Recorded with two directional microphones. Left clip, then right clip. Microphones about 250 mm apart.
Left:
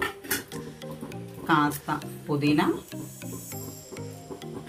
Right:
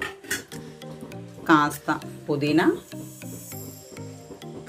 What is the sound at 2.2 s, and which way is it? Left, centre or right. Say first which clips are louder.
Speech: right 3 dB; right.